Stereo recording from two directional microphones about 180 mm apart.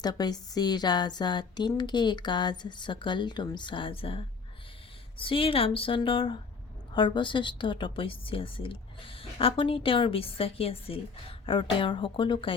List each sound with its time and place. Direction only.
0.0 s a woman's voice: 20° left (ahead or behind)